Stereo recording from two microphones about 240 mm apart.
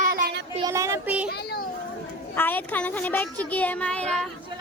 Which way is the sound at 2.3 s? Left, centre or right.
Centre.